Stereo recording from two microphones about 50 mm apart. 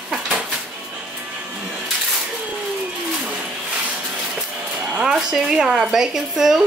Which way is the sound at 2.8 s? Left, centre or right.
Centre.